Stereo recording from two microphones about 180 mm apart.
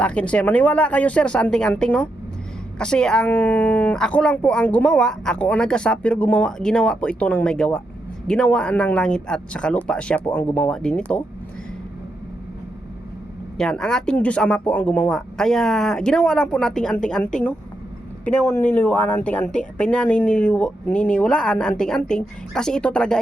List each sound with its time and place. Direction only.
0.0 s speech: 5° left (ahead or behind)
13.6 s speech: 5° left (ahead or behind)